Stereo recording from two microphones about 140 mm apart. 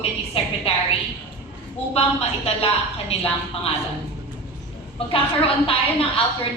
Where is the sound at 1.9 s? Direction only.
45° left (ahead or behind).